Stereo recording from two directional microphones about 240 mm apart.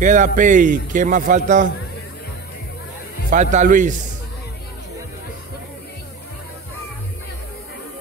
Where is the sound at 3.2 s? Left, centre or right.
Right.